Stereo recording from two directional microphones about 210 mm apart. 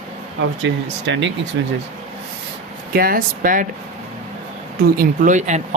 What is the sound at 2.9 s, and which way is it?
Speech, 45° right (ahead or behind).